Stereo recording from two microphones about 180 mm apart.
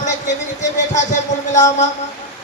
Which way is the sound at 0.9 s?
45° left (ahead or behind).